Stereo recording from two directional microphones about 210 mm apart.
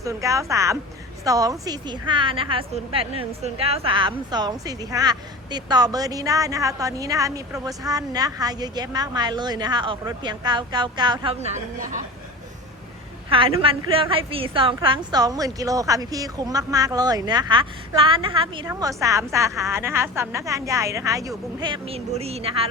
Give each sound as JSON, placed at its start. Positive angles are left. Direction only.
{"t": 0.0, "sound": "a woman's voice", "side_deg": -15}
{"t": 11.8, "sound": "a woman's voice", "side_deg": -40}
{"t": 13.6, "sound": "a woman's voice", "side_deg": -25}